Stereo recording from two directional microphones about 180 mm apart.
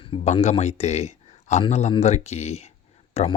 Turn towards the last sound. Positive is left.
turn(degrees=35)  # may be behind; listen again after turning